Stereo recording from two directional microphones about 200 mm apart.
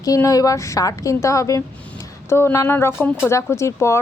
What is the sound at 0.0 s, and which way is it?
Speech, 15° left (ahead or behind).